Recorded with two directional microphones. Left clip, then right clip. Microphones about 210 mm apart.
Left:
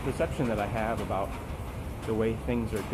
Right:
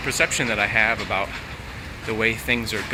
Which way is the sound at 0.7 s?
10° right (ahead or behind).